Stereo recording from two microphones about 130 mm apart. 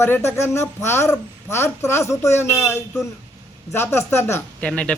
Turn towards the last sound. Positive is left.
turn(degrees=10)  # may be behind; listen again after turning